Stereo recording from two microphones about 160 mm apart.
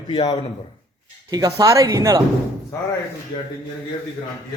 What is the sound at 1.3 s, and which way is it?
Speech, 25° right (ahead or behind).